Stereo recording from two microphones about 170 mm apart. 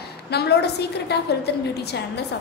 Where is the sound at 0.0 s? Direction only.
70° left (ahead or behind).